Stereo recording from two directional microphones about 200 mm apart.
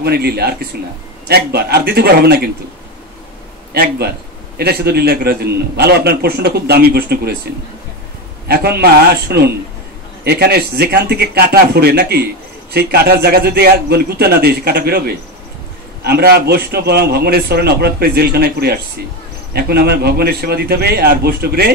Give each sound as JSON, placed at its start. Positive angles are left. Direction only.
{"t": 0.0, "sound": "a man's voice", "side_deg": -50}
{"t": 3.7, "sound": "a man's voice", "side_deg": -50}
{"t": 8.5, "sound": "a man's voice", "side_deg": -50}